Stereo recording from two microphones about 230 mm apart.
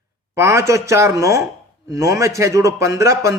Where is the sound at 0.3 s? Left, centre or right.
Centre.